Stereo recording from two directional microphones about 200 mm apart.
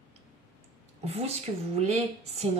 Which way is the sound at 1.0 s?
30° right (ahead or behind).